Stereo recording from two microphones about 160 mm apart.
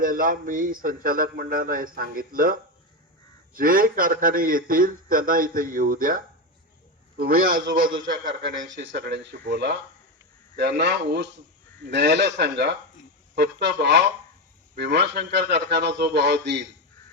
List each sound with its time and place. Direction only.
0.0 s a man's voice: 60° right (ahead or behind)
7.2 s a man's voice: 65° right (ahead or behind)
8.2 s a man's voice: 90° right